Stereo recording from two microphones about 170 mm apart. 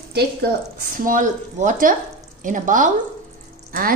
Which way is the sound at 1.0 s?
50° right (ahead or behind).